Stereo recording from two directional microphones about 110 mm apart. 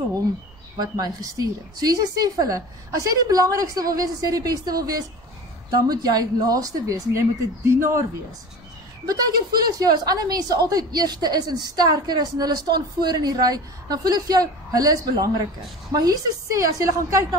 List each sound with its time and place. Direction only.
0.7 s a woman's voice: 30° right (ahead or behind)
9.0 s a woman's voice: 35° right (ahead or behind)